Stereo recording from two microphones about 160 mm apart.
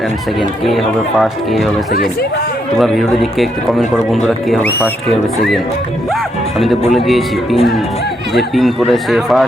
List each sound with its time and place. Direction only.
0.3 s a man's voice: centre (ahead or behind)
2.7 s a man's voice: centre (ahead or behind)
6.9 s a man's voice: centre (ahead or behind)